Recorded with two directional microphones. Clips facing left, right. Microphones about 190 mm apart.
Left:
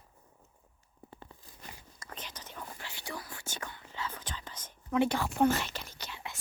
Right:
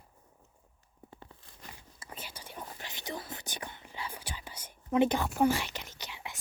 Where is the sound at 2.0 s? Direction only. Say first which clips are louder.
Even; 10° right (ahead or behind).